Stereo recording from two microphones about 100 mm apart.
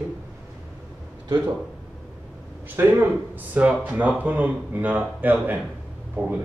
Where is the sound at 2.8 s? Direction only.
20° right (ahead or behind).